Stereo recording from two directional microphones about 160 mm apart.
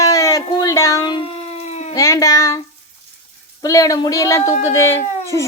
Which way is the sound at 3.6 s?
20° left (ahead or behind).